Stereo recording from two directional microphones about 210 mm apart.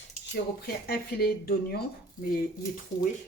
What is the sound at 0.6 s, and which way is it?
Speech, 50° left (ahead or behind).